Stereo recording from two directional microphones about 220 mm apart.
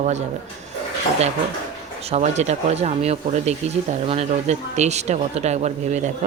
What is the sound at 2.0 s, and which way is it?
A woman's voice, 30° right (ahead or behind).